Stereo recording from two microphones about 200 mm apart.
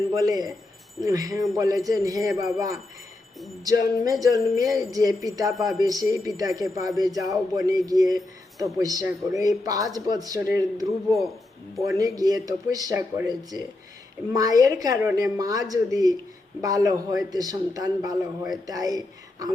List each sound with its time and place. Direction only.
0.1 s speech: 20° right (ahead or behind)
3.6 s speech: 20° right (ahead or behind)